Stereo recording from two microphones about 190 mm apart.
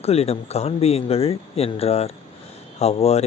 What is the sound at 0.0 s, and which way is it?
Speech, 30° left (ahead or behind).